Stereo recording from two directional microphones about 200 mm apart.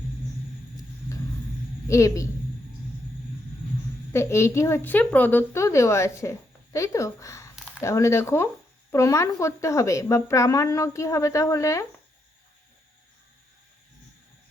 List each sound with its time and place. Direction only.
1.9 s a woman's voice: 15° left (ahead or behind)
4.1 s a woman's voice: 15° left (ahead or behind)